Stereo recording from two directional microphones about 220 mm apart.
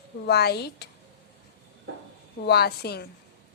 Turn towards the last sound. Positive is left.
turn(degrees=45)  # may be behind; listen again after turning